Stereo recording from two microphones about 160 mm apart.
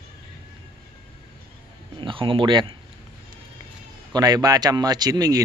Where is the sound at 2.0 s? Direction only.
35° right (ahead or behind).